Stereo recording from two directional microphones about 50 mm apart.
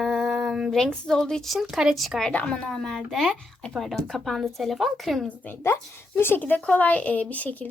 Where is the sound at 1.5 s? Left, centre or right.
Centre.